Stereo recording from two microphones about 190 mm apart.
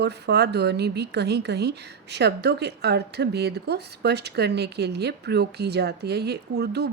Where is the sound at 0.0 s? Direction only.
60° right (ahead or behind).